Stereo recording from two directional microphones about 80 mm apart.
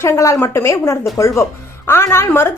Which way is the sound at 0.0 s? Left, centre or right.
Left.